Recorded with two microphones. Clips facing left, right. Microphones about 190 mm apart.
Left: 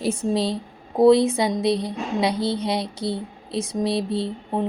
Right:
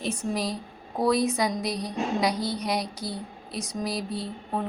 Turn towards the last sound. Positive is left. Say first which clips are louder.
# left 6 dB
turn(degrees=25)  # may be behind; listen again after turning